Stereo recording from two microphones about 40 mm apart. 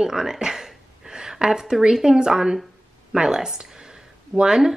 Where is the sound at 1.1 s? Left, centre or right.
Centre.